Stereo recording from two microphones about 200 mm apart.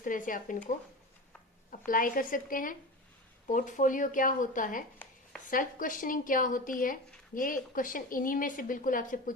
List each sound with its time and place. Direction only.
0.0 s a woman's voice: 40° left (ahead or behind)
1.9 s a woman's voice: 45° left (ahead or behind)